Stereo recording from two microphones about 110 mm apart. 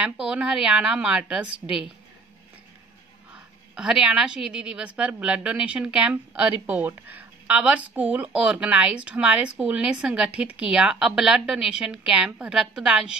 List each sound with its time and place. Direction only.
0.0 s a woman's voice: 10° right (ahead or behind)
3.3 s a woman's voice: 10° right (ahead or behind)